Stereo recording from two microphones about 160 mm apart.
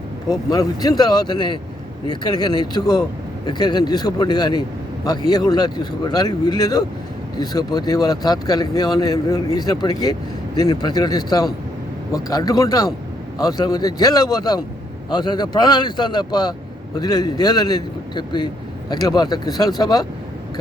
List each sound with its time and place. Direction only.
0.3 s speech: 25° left (ahead or behind)